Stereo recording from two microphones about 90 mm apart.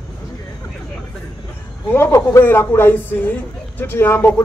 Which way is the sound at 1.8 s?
25° left (ahead or behind).